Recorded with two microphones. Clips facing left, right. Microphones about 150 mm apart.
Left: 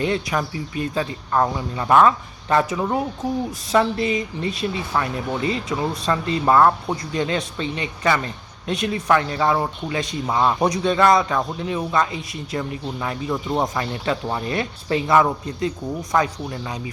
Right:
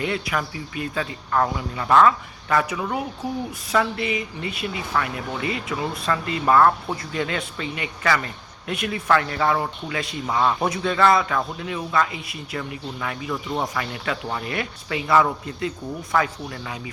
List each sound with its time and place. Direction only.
0.0 s speech: 25° left (ahead or behind)
3.9 s speech: 35° left (ahead or behind)
5.7 s speech: 20° left (ahead or behind)
13.7 s speech: 30° left (ahead or behind)
15.0 s speech: 20° left (ahead or behind)